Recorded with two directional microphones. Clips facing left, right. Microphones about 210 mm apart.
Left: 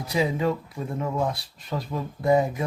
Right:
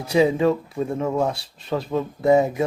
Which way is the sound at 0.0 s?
25° right (ahead or behind).